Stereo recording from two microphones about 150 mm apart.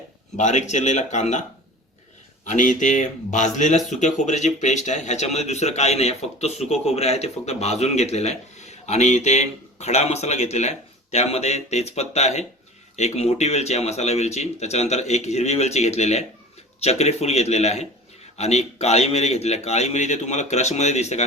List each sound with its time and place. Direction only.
0.3 s speech: 50° left (ahead or behind)